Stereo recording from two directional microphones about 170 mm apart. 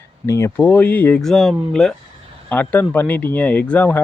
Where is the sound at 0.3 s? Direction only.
15° left (ahead or behind).